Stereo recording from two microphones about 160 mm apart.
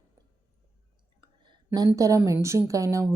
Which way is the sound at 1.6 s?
20° right (ahead or behind).